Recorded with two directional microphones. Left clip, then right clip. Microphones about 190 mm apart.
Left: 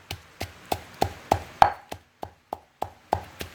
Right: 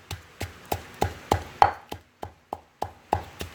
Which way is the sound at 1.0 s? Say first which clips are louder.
Left 1 dB; centre (ahead or behind).